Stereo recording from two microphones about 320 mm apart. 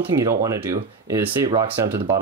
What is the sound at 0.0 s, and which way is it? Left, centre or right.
Speech, centre.